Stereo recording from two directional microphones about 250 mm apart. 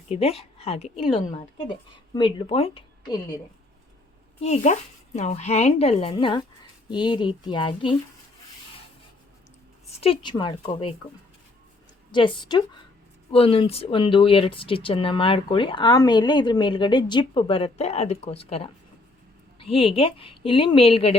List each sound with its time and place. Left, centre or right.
0.1 s speech: left
4.4 s speech: left
10.0 s speech: centre
12.1 s a woman's voice: centre